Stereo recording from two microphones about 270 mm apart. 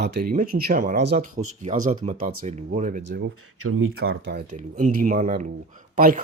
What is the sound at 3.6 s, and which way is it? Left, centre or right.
Speech, right.